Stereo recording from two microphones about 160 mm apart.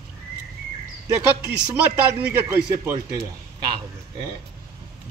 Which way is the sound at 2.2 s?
15° right (ahead or behind).